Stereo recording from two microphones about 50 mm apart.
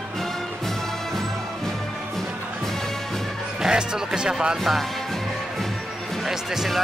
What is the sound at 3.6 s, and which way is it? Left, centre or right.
Speech, centre.